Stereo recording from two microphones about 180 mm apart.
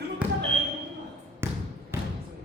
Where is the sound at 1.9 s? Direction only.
15° right (ahead or behind).